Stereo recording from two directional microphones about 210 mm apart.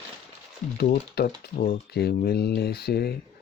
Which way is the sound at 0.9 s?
45° left (ahead or behind).